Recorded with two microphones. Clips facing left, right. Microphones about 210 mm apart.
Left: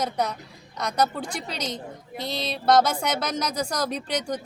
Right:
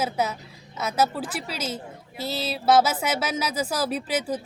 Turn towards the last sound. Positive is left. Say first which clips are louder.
# right 2 dB
turn(degrees=-5)  # may be behind; listen again after turning